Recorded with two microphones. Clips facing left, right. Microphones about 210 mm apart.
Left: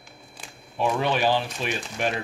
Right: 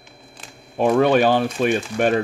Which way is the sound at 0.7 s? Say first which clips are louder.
Right 9 dB; 55° right (ahead or behind).